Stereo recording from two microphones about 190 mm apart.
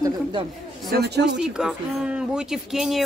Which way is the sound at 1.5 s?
5° right (ahead or behind).